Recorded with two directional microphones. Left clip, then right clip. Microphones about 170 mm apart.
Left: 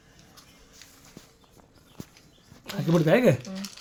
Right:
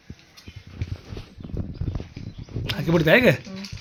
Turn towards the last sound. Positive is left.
turn(degrees=5)  # may be behind; listen again after turning